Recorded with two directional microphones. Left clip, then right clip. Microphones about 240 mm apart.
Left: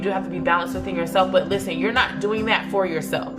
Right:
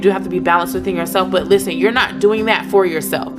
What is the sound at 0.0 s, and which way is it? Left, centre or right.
Speech, right.